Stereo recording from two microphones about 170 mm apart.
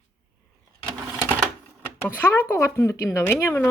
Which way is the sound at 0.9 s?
15° right (ahead or behind).